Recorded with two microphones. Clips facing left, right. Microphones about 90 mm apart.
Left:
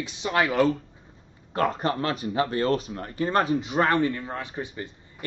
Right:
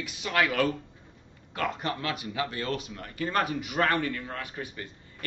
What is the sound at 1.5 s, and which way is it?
Speech, 40° left (ahead or behind).